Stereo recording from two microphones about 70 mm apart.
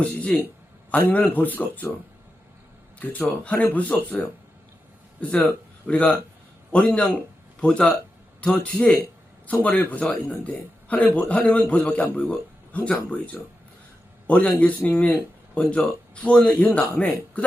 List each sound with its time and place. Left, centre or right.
0.0 s a man's voice: centre
3.0 s a man's voice: left
5.3 s a man's voice: centre